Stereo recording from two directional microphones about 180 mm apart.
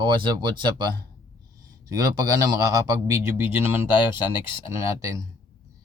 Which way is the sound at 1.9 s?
20° right (ahead or behind).